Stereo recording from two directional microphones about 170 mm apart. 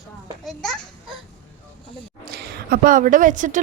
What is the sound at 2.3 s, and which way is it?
A woman's voice, 65° right (ahead or behind).